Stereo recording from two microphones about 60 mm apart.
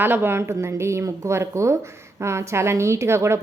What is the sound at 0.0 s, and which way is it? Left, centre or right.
A woman's voice, right.